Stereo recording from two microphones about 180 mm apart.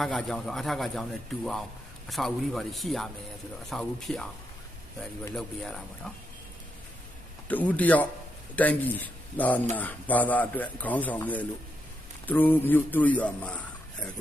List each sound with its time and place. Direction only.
0.0 s a man's voice: centre (ahead or behind)
2.0 s a man's voice: centre (ahead or behind)
5.3 s a man's voice: centre (ahead or behind)
7.4 s a man's voice: 10° left (ahead or behind)